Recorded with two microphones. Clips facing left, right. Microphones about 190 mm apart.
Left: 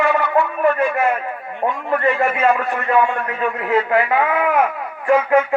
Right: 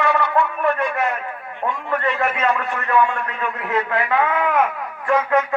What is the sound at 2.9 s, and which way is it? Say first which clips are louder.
A man's voice: left 1 dB; 20° left (ahead or behind).